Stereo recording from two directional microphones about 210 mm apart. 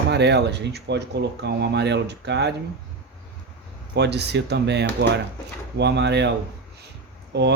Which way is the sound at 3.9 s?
55° right (ahead or behind).